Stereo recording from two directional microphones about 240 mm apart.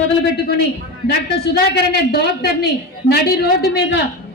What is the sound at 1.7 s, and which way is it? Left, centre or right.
A woman's voice, left.